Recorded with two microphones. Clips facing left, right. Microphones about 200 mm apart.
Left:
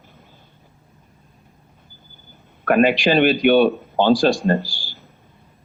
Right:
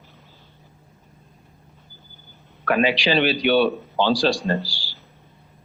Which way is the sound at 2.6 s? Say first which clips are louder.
Left 4 dB; 50° left (ahead or behind).